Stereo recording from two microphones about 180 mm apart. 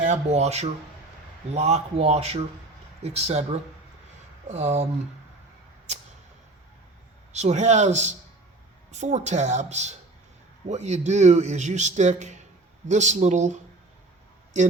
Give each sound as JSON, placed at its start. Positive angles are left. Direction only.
{"t": 0.0, "sound": "a man's voice", "side_deg": -40}
{"t": 4.4, "sound": "a man's voice", "side_deg": -40}
{"t": 7.3, "sound": "a man's voice", "side_deg": -40}